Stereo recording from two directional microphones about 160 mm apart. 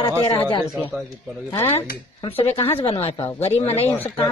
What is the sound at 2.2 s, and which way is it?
Speech, 35° left (ahead or behind).